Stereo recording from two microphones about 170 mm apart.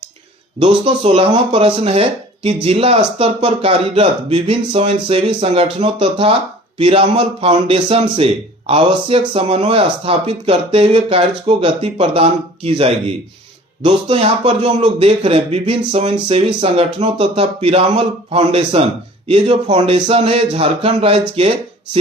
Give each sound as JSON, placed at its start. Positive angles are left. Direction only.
{"t": 0.6, "sound": "speech", "side_deg": -35}